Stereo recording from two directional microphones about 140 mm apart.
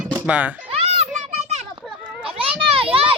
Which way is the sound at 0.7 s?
50° right (ahead or behind).